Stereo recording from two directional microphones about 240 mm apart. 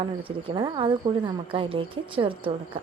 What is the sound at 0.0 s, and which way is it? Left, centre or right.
Speech, right.